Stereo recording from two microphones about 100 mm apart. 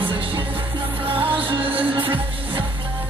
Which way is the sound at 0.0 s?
60° right (ahead or behind).